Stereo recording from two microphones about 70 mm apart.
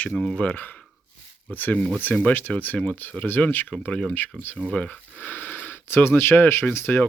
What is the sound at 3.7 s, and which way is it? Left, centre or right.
Speech, centre.